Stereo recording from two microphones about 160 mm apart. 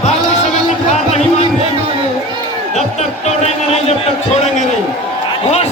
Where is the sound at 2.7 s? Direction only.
45° left (ahead or behind).